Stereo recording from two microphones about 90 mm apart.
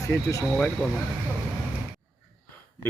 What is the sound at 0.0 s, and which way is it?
Speech, 40° left (ahead or behind).